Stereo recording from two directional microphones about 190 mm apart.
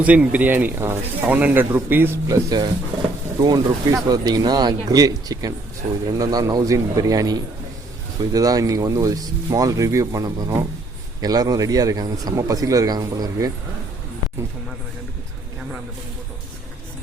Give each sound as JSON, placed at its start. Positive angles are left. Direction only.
{"t": 0.0, "sound": "speech", "side_deg": -5}